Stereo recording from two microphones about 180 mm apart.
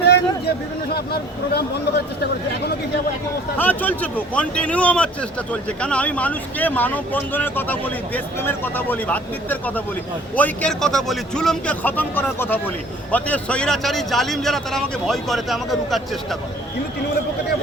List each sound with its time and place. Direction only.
0.0 s chatter: 65° left (ahead or behind)
0.9 s speech: 60° left (ahead or behind)
3.6 s a man's voice: 10° left (ahead or behind)